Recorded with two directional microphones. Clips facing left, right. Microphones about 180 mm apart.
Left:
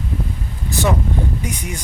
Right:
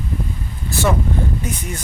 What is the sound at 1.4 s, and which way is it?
Speech, 15° left (ahead or behind).